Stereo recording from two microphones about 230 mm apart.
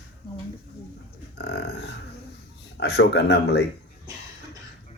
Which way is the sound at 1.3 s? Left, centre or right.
Left.